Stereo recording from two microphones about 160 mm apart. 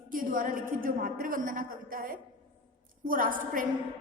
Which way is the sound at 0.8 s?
60° right (ahead or behind).